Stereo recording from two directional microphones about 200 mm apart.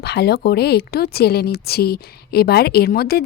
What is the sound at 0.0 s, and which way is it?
Speech, 55° left (ahead or behind).